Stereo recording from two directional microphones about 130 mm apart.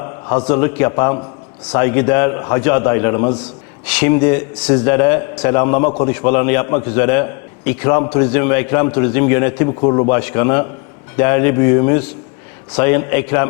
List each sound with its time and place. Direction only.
0.0 s a man's voice: 30° left (ahead or behind)
10.1 s a man's voice: 20° left (ahead or behind)